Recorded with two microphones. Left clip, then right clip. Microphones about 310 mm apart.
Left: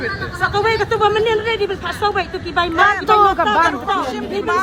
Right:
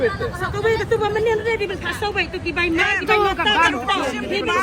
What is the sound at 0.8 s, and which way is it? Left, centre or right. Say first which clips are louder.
Speech: left 4 dB; centre.